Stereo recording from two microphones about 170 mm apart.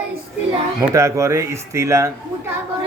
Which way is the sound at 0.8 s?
15° right (ahead or behind).